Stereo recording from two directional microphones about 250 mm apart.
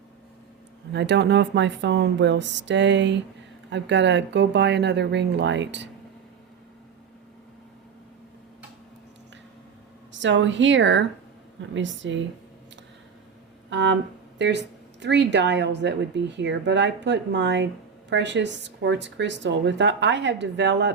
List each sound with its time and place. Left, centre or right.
0.9 s speech: right
10.1 s speech: right
13.7 s speech: right